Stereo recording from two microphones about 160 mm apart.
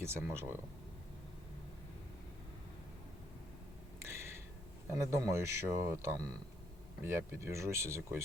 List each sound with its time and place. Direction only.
0.0 s speech: 15° right (ahead or behind)
4.0 s a sound: 15° right (ahead or behind)
4.9 s speech: 15° right (ahead or behind)